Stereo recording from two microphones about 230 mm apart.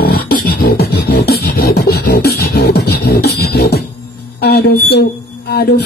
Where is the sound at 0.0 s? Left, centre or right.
Left.